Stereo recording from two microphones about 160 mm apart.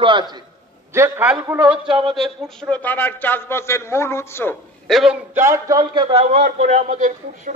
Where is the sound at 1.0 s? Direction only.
15° right (ahead or behind).